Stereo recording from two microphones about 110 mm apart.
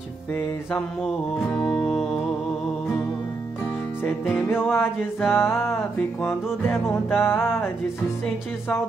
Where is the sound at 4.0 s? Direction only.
10° left (ahead or behind).